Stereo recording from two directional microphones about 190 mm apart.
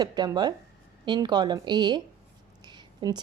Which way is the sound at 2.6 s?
25° right (ahead or behind).